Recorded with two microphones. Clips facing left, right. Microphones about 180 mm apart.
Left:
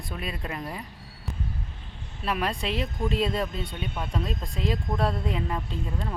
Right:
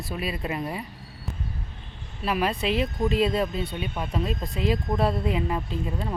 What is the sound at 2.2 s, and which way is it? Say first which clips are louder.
Speech: right 3 dB; 5° right (ahead or behind).